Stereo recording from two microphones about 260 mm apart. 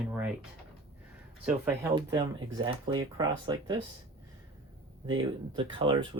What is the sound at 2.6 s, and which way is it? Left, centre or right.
Speech, centre.